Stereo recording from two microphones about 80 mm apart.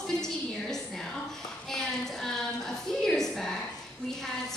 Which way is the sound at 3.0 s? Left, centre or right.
Centre.